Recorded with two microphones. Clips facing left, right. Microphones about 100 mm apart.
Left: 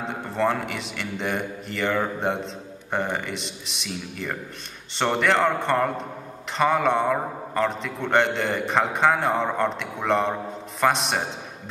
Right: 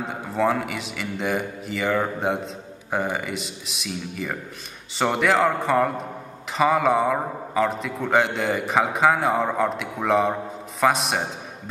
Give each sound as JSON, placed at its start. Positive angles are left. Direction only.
{"t": 0.1, "sound": "a man's voice", "side_deg": 0}